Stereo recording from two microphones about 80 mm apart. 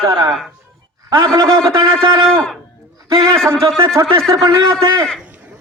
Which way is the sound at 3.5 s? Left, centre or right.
Right.